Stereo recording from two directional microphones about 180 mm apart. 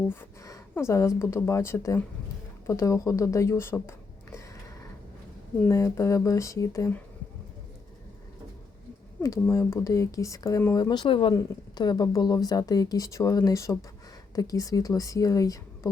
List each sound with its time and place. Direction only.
0.1 s speech: 15° left (ahead or behind)
5.6 s speech: 15° left (ahead or behind)
9.2 s speech: 15° left (ahead or behind)